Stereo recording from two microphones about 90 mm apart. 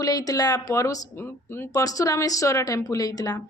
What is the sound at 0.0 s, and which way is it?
A woman's voice, 45° left (ahead or behind).